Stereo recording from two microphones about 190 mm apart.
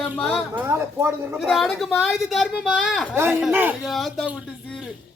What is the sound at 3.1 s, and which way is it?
A man's voice, 15° right (ahead or behind).